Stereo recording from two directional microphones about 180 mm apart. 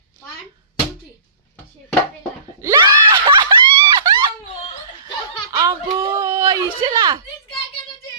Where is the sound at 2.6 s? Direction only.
20° right (ahead or behind).